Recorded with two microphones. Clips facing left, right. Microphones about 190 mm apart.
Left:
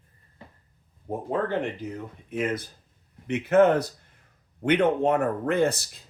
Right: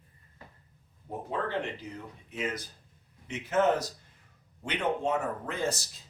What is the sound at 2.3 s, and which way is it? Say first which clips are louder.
A man's voice: left 7 dB; 55° left (ahead or behind).